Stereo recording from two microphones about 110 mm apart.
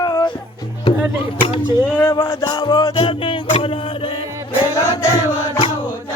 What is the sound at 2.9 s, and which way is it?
Music, 50° left (ahead or behind).